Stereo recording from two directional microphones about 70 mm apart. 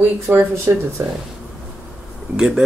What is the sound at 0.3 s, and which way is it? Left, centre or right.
Speech, right.